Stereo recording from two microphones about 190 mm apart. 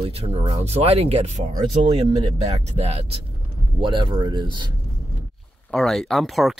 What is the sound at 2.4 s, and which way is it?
Speech, 35° right (ahead or behind).